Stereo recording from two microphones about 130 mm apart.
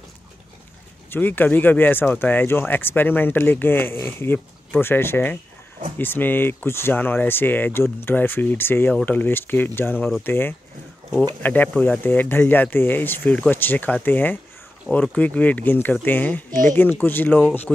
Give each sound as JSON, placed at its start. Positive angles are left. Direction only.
{"t": 1.1, "sound": "speech", "side_deg": 15}